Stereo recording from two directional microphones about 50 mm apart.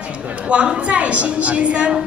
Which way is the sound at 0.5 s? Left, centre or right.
Right.